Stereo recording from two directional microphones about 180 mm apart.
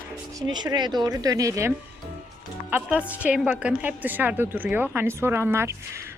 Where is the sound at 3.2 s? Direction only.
10° right (ahead or behind).